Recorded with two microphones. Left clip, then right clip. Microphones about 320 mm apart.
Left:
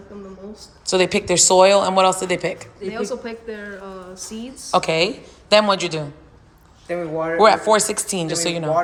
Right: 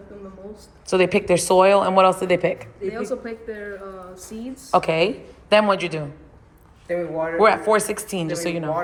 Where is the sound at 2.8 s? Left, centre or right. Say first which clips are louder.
Left 1 dB; left.